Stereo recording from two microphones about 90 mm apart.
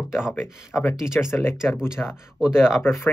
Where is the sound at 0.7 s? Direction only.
10° left (ahead or behind).